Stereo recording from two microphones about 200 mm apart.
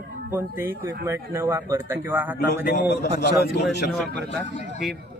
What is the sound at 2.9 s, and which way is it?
A man's voice, 55° left (ahead or behind).